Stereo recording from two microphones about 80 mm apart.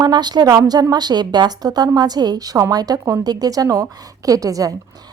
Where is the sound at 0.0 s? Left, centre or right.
Right.